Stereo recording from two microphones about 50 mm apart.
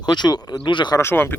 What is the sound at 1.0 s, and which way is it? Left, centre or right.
Speech, left.